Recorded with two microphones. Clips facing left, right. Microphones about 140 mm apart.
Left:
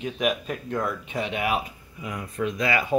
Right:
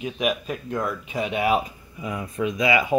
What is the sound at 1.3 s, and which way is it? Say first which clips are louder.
Speech: right 6 dB; 30° right (ahead or behind).